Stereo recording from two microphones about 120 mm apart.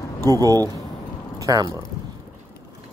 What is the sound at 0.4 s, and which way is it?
Speech, 30° right (ahead or behind).